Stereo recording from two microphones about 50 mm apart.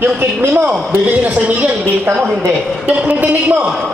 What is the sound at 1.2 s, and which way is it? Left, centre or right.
A man's voice, right.